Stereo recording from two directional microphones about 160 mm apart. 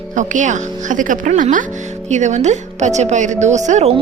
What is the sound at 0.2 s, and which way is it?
A woman's voice, 50° right (ahead or behind).